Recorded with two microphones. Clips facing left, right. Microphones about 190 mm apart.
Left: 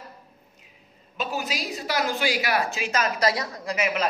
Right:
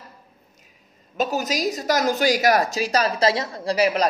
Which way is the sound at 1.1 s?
40° right (ahead or behind).